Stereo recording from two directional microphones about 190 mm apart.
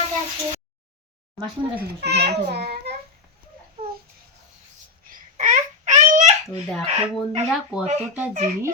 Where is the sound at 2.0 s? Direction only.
60° right (ahead or behind).